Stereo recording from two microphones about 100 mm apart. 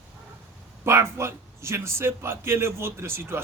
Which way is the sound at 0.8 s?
25° right (ahead or behind).